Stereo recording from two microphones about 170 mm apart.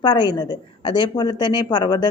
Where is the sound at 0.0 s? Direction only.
25° left (ahead or behind).